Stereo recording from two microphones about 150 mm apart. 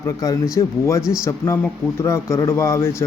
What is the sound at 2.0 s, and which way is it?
Speech, 15° left (ahead or behind).